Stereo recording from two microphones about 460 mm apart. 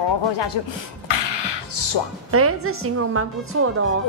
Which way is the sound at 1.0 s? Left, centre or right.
Left.